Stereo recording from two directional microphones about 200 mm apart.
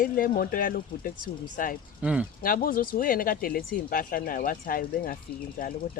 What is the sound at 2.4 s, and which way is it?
Speech, 45° left (ahead or behind).